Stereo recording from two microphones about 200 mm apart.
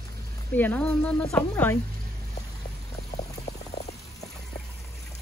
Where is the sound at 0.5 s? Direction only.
10° left (ahead or behind).